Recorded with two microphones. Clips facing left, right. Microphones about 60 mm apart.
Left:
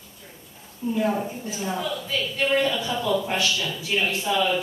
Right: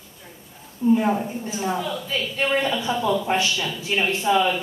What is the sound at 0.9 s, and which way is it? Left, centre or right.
Speech, right.